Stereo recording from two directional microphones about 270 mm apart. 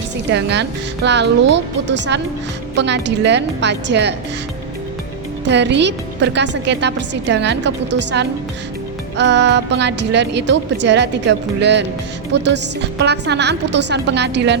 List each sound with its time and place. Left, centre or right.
0.3 s a woman's voice: right
5.5 s a woman's voice: right